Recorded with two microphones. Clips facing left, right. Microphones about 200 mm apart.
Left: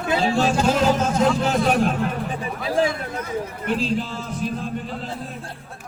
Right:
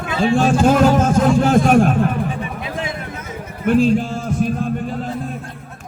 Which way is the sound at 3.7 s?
50° right (ahead or behind).